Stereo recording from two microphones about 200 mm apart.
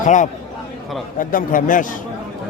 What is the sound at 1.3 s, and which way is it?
Speech, 40° left (ahead or behind).